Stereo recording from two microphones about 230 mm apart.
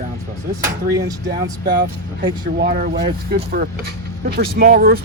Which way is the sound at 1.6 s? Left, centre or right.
Right.